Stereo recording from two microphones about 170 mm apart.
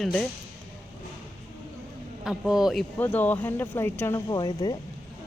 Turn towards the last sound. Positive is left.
turn(degrees=25)  # may be behind; listen again after turning